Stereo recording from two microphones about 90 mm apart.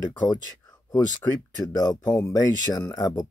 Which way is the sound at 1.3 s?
50° left (ahead or behind).